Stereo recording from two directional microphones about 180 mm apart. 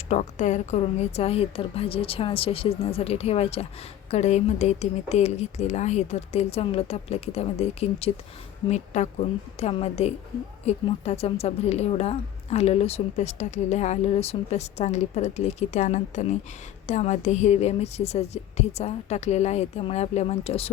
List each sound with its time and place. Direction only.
0.1 s speech: 40° left (ahead or behind)